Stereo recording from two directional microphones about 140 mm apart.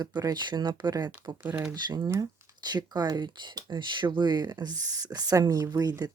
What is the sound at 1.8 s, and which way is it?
Speech, 30° right (ahead or behind).